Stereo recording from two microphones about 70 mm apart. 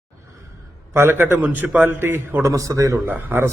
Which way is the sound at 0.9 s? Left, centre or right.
Right.